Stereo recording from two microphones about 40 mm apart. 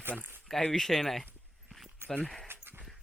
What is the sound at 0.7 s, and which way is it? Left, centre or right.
Speech, centre.